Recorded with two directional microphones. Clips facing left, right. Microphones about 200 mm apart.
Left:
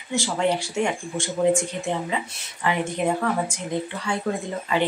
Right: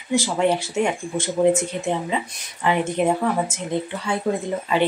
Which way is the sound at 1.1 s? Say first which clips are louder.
Right 3 dB; 20° right (ahead or behind).